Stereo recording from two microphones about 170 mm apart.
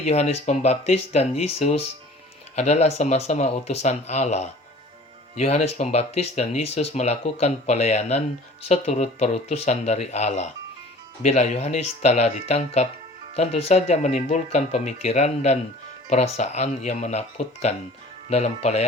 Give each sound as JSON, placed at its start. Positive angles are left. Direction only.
{"t": 0.0, "sound": "speech", "side_deg": 40}